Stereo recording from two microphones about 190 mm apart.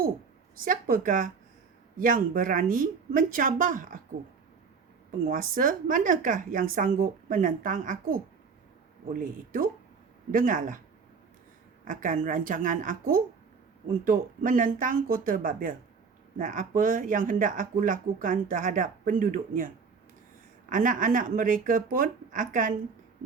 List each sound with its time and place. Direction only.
0.6 s speech: 50° right (ahead or behind)
5.2 s speech: 45° right (ahead or behind)
11.9 s speech: 45° right (ahead or behind)